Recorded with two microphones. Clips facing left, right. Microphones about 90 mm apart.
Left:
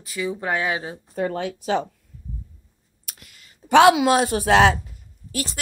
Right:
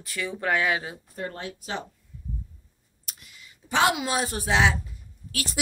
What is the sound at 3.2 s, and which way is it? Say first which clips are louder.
Speech: left 2 dB; 75° left (ahead or behind).